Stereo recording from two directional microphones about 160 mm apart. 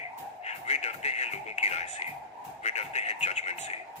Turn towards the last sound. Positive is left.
turn(degrees=45)  # may be behind; listen again after turning